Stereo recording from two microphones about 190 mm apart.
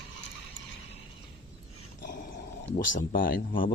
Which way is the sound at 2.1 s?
45° left (ahead or behind).